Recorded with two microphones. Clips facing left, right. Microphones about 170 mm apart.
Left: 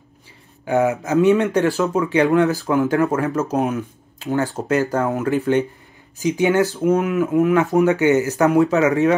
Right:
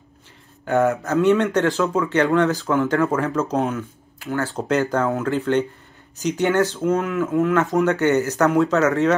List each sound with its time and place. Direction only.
0.7 s speech: centre (ahead or behind)
1.0 s speech: 15° left (ahead or behind)
3.5 s speech: 15° left (ahead or behind)